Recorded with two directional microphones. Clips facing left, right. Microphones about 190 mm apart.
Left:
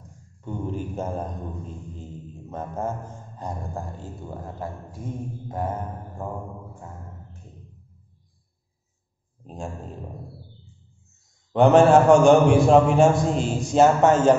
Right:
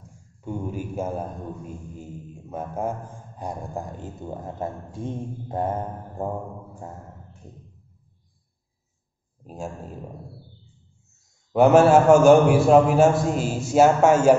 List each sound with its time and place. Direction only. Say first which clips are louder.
0.4 s a man's voice: even; 10° right (ahead or behind); by 6.3 s 35° right (ahead or behind)
9.4 s speech: right 1 dB; 5° right (ahead or behind)
11.5 s a man's voice: even; 5° right (ahead or behind)